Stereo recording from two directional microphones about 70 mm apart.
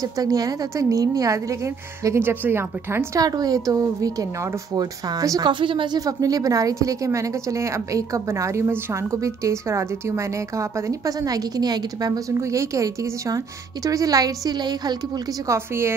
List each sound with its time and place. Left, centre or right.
0.0 s a woman's voice: right
2.1 s a woman's voice: right
3.2 s a woman's voice: right
5.4 s a woman's voice: right
12.4 s a woman's voice: right
15.4 s a woman's voice: right